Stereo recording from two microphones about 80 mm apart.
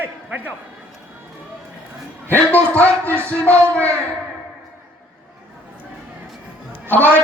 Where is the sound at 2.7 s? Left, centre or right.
Centre.